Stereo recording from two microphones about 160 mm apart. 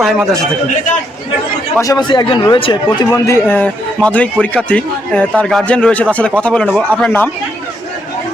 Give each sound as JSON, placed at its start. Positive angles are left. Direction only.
{"t": 0.0, "sound": "a man's voice", "side_deg": 0}
{"t": 1.8, "sound": "a man's voice", "side_deg": 25}
{"t": 3.1, "sound": "a man's voice", "side_deg": 15}
{"t": 6.7, "sound": "speech", "side_deg": -10}
{"t": 7.0, "sound": "a man's voice", "side_deg": 10}